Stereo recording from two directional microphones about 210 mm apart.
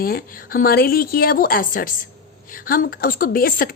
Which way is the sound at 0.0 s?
45° left (ahead or behind).